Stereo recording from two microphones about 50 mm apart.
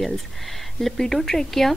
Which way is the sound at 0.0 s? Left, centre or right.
Centre.